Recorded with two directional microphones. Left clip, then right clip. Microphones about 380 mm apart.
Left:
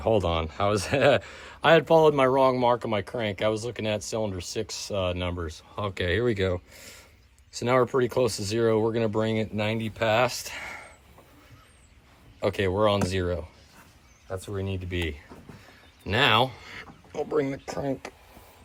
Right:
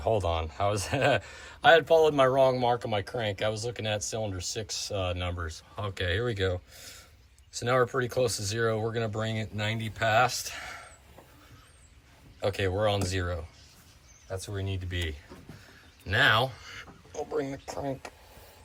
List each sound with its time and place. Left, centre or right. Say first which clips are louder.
0.0 s speech: left 3 dB; left
12.4 s speech: left 4 dB; centre
15.6 s a sound: left 10 dB; centre
17.2 s speech: left 5 dB; left